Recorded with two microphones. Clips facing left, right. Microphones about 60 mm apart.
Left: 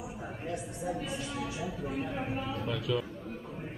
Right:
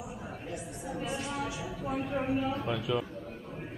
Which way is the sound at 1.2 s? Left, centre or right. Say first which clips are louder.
Right 1 dB; right.